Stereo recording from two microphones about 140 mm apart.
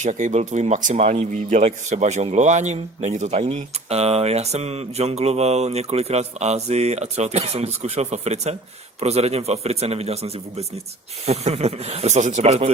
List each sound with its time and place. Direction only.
0.0 s speech: 60° right (ahead or behind)